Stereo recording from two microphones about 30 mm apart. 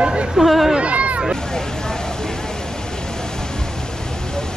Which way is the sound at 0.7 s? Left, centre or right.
Right.